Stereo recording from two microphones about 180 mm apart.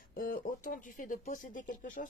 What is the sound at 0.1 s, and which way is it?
Speech, 50° left (ahead or behind).